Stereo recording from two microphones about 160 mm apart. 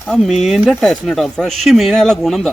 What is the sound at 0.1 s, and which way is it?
Speech, centre (ahead or behind).